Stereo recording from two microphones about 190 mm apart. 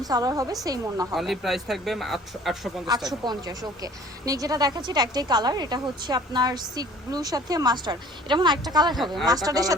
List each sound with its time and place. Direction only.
0.0 s a woman's voice: 20° right (ahead or behind)
1.1 s speech: centre (ahead or behind)
2.9 s a woman's voice: 20° right (ahead or behind)